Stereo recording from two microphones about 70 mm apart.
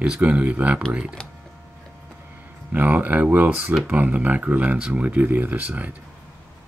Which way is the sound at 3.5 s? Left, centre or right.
Centre.